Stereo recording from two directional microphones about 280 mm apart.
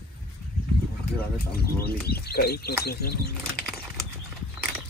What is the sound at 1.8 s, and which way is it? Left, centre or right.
Speech, left.